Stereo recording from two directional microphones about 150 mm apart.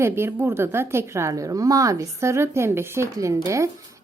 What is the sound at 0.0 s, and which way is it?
A woman's voice, 15° right (ahead or behind).